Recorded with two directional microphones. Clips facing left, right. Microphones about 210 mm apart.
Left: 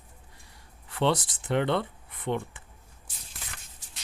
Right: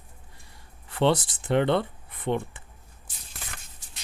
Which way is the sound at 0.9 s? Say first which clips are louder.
Right 3 dB; 30° right (ahead or behind).